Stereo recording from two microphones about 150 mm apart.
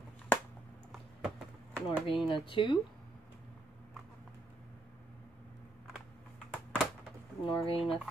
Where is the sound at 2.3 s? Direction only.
35° left (ahead or behind).